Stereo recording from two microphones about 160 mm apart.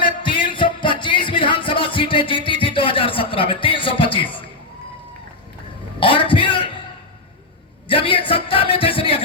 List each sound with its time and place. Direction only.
0.0 s music: 30° left (ahead or behind)
6.0 s a sound: 30° left (ahead or behind)
7.9 s music: 35° left (ahead or behind)